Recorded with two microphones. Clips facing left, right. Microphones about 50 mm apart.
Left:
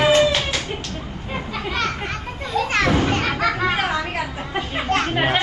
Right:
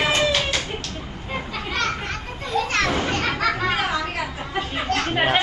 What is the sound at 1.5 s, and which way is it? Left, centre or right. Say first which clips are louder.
Children playing: left 1 dB; centre.